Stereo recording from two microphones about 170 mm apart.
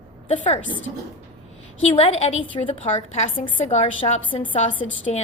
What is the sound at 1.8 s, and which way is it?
A woman's voice, 35° left (ahead or behind).